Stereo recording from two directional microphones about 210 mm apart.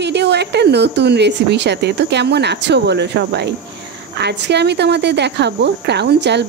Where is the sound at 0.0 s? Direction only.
55° right (ahead or behind).